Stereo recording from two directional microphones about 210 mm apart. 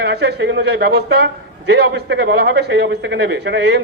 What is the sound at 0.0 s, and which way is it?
A man's voice, 50° right (ahead or behind).